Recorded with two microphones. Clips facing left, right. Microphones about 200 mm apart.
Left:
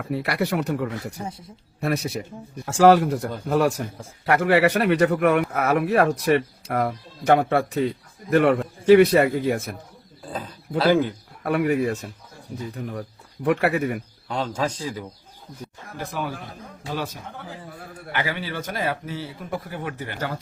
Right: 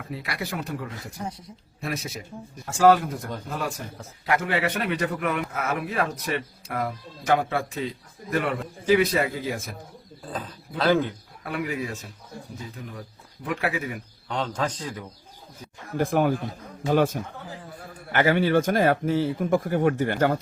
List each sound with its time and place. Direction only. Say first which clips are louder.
0.0 s a man's voice: left 8 dB; 65° left (ahead or behind)
10.3 s speech: left 5 dB; 10° left (ahead or behind)
11.4 s a man's voice: left 8 dB; 60° left (ahead or behind)
14.3 s a man's voice: left 2 dB; 10° left (ahead or behind)
16.0 s speech: right 8 dB; 50° right (ahead or behind)